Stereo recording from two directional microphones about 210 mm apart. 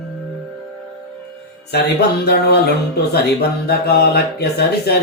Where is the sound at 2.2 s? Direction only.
50° left (ahead or behind).